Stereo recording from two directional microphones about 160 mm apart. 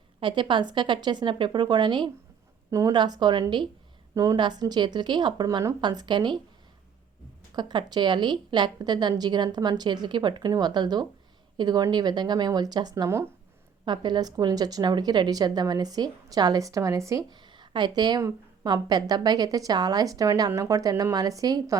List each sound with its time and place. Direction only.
0.2 s speech: 30° right (ahead or behind)
7.5 s speech: 30° right (ahead or behind)
13.8 s speech: 30° right (ahead or behind)